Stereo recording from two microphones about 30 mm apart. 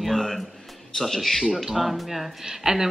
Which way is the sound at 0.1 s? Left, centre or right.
Centre.